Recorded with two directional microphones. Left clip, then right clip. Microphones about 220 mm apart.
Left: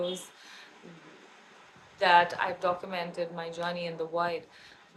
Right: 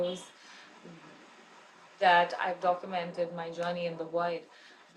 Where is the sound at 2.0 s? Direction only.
15° left (ahead or behind).